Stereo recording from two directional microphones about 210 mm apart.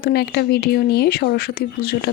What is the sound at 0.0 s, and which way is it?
Speech, 50° left (ahead or behind).